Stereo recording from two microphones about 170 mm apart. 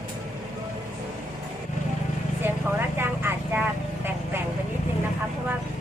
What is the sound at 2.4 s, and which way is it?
Vehicle, 15° right (ahead or behind).